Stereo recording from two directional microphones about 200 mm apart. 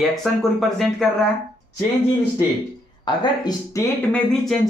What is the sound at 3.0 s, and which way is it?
Speech, 20° left (ahead or behind).